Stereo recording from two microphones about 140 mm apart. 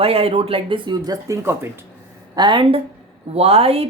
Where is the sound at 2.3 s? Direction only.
35° right (ahead or behind).